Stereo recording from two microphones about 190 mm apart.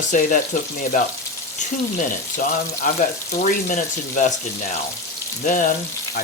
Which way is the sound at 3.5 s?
45° left (ahead or behind).